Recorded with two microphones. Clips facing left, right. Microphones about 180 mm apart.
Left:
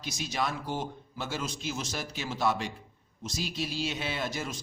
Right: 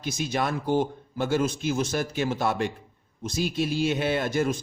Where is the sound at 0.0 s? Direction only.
55° right (ahead or behind).